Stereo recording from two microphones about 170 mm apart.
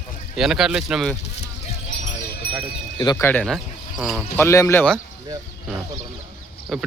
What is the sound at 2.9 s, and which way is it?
Speech, 20° left (ahead or behind).